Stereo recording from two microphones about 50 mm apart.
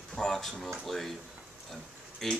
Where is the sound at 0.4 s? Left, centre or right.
Centre.